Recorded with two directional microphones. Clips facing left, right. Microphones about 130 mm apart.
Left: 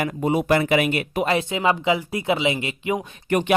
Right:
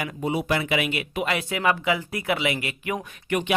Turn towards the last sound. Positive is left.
turn(degrees=40)  # may be behind; listen again after turning